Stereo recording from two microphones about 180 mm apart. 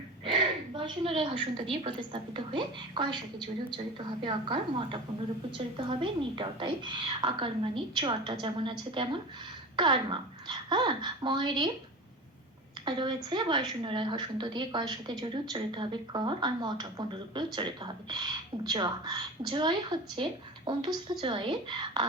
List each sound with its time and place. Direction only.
0.3 s a sound: 25° right (ahead or behind)
1.8 s a woman's voice: 30° right (ahead or behind)
12.8 s a woman's voice: 25° right (ahead or behind)